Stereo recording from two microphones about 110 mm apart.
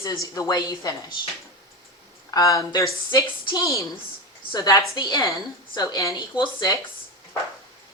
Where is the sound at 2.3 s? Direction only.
30° left (ahead or behind).